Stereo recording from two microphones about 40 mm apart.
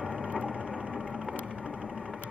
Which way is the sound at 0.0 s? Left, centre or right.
Right.